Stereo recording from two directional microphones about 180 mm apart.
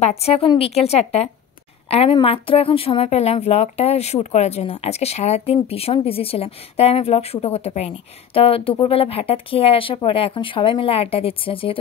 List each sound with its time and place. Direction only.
0.0 s speech: 35° left (ahead or behind)